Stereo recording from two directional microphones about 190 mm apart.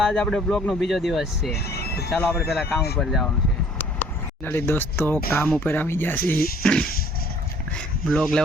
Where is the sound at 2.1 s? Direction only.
Centre (ahead or behind).